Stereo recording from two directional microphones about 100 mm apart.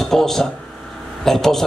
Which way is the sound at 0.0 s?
5° left (ahead or behind).